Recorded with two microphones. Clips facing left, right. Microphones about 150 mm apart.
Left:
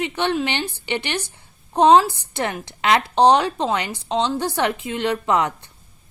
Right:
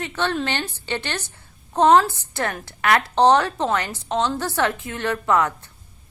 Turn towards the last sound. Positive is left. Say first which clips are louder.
# even
turn(degrees=20)  # may be behind; listen again after turning